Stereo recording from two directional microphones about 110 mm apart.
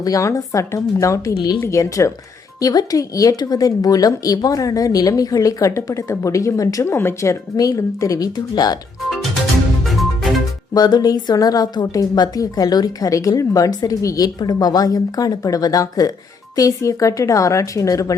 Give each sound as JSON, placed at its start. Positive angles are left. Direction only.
{"t": 0.0, "sound": "a woman's voice", "side_deg": 30}
{"t": 9.8, "sound": "music", "side_deg": 0}
{"t": 10.8, "sound": "a woman's voice", "side_deg": 40}